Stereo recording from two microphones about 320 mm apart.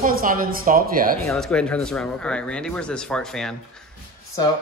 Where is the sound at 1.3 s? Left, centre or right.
Centre.